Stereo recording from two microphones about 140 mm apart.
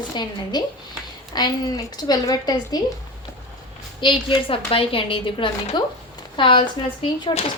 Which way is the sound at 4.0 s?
35° left (ahead or behind).